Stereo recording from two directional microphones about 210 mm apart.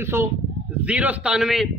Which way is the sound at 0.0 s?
10° right (ahead or behind).